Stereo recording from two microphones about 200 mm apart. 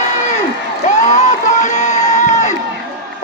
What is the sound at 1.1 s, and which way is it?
Crowd, 35° left (ahead or behind).